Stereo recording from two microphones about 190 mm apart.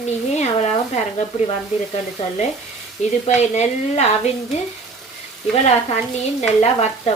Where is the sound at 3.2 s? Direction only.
35° left (ahead or behind).